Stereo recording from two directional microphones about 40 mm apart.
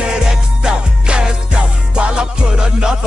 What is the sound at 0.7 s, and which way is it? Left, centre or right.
Music, right.